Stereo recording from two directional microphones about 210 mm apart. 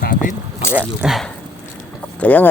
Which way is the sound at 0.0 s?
40° left (ahead or behind).